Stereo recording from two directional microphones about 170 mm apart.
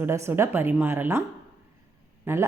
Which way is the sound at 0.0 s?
15° right (ahead or behind).